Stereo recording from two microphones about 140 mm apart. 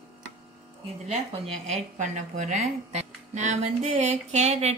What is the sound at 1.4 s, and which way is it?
A woman's voice, 50° right (ahead or behind).